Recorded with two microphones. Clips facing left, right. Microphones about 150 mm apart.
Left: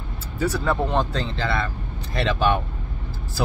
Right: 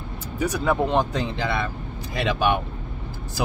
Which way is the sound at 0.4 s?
15° right (ahead or behind).